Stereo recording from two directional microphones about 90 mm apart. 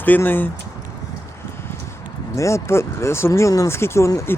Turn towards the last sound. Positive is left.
turn(degrees=25)  # may be behind; listen again after turning